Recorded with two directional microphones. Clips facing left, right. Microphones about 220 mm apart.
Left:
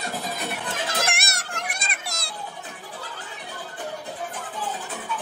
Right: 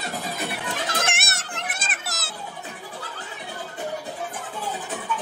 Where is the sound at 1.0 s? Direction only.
Centre (ahead or behind).